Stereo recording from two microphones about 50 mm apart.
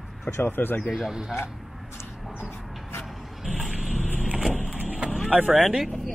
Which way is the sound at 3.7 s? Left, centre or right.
Centre.